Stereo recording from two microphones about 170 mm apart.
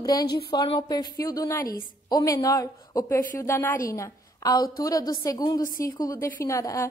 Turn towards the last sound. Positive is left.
turn(degrees=20)  # may be behind; listen again after turning